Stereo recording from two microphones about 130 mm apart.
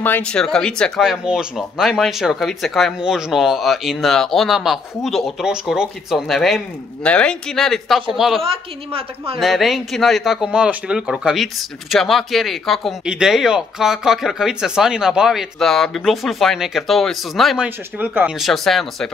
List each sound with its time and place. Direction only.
0.0 s speech: 10° left (ahead or behind)
8.9 s speech: 45° right (ahead or behind)
9.4 s speech: centre (ahead or behind)
17.6 s a man's voice: 15° right (ahead or behind)
18.4 s speech: centre (ahead or behind)